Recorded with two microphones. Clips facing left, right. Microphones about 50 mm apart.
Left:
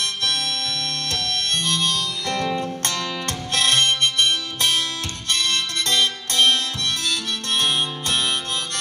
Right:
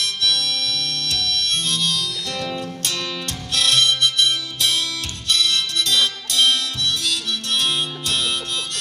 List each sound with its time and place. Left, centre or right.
0.0 s harmonica: left
2.8 s music: left